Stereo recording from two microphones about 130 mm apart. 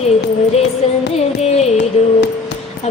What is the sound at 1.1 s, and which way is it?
Music, 55° left (ahead or behind).